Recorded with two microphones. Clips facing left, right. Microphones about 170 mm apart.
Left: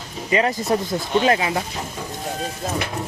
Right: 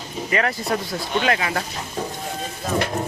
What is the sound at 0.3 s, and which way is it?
Speech, 20° left (ahead or behind).